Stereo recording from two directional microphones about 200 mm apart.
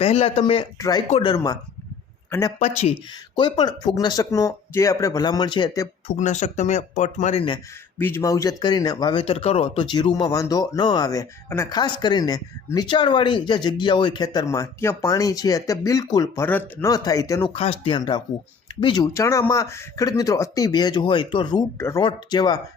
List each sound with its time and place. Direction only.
0.0 s speech: 30° left (ahead or behind)
3.3 s speech: 20° left (ahead or behind)
6.1 s speech: 35° left (ahead or behind)
7.9 s speech: 10° left (ahead or behind)
17.5 s speech: 30° left (ahead or behind)